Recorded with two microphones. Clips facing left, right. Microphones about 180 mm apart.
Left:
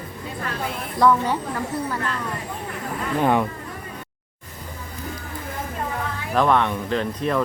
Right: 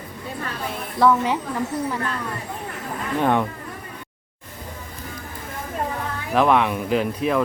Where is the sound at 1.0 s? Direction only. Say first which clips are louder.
Even; 5° right (ahead or behind).